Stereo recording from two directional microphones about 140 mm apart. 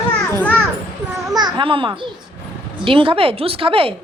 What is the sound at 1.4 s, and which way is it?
A child's voice, 30° right (ahead or behind).